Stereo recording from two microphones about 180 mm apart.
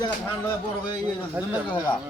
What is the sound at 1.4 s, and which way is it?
Speech, 10° right (ahead or behind).